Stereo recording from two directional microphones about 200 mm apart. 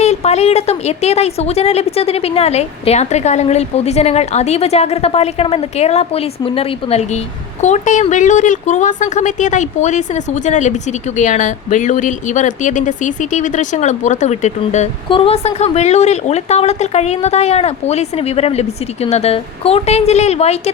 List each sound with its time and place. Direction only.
0.0 s speech: 30° left (ahead or behind)